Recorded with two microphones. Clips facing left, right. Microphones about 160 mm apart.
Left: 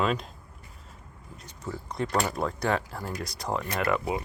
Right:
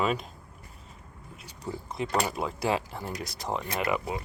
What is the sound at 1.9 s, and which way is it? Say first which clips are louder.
Speech: left 1 dB; 5° right (ahead or behind).